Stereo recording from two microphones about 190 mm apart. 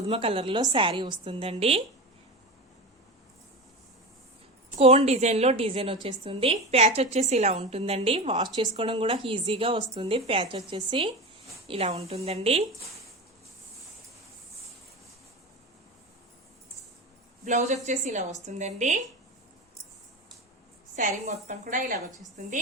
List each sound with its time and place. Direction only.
0.1 s speech: 30° right (ahead or behind)
4.8 s a woman's voice: 35° right (ahead or behind)
17.4 s a woman's voice: 35° right (ahead or behind)
20.9 s a woman's voice: 40° right (ahead or behind)